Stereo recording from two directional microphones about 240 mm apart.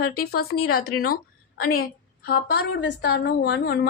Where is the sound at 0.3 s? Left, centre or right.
Left.